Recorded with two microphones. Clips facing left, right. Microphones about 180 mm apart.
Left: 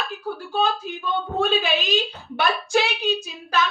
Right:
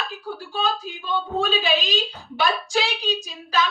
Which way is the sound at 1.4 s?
55° left (ahead or behind).